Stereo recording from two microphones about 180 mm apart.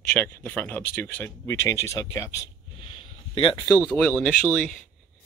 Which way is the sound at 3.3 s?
30° left (ahead or behind).